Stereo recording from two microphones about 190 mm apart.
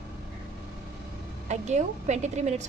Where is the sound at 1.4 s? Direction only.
40° right (ahead or behind).